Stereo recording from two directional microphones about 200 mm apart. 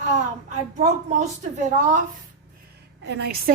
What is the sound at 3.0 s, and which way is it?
Speech, 55° right (ahead or behind).